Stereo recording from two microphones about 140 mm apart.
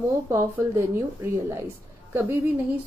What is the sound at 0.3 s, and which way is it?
A woman's voice, 20° right (ahead or behind).